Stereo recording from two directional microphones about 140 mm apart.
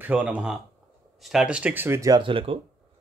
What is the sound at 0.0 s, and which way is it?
Speech, 10° right (ahead or behind).